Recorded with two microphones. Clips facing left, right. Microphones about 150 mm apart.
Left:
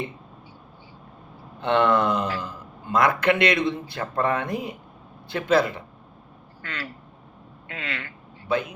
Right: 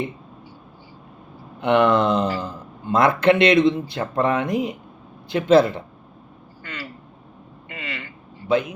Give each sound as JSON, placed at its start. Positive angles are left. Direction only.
{"t": 1.6, "sound": "a man's voice", "side_deg": -15}
{"t": 6.6, "sound": "speech", "side_deg": -5}
{"t": 7.7, "sound": "a sound", "side_deg": -5}
{"t": 8.4, "sound": "a man's voice", "side_deg": -20}